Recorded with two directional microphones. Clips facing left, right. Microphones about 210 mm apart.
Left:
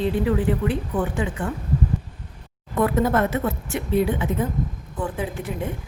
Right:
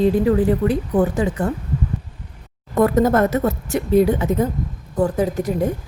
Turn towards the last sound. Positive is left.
turn(degrees=-40)  # may be behind; listen again after turning